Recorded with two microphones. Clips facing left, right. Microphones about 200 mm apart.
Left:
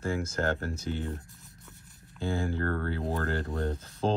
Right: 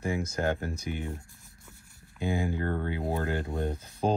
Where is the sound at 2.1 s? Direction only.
15° right (ahead or behind).